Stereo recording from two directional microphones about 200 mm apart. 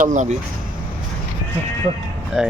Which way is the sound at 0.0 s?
40° right (ahead or behind).